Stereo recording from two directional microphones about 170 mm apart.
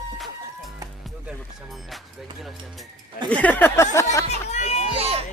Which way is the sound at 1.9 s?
Centre (ahead or behind).